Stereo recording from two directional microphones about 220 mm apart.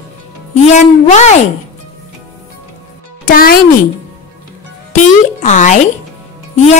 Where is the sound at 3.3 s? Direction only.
40° left (ahead or behind).